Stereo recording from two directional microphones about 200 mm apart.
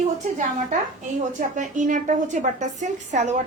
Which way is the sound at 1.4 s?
40° right (ahead or behind).